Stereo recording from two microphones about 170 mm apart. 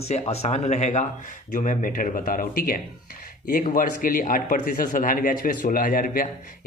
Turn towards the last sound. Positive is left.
turn(degrees=55)  # may be behind; listen again after turning